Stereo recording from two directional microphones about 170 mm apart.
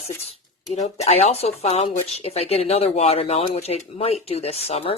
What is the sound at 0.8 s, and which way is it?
Speech, 40° left (ahead or behind).